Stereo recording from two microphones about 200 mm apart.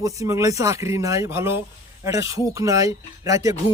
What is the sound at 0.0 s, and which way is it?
Speech, 15° right (ahead or behind).